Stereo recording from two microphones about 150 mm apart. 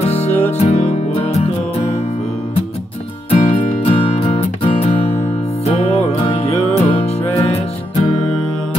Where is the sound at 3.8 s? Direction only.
40° left (ahead or behind).